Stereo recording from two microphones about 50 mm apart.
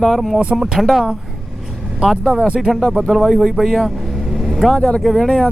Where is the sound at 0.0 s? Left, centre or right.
Centre.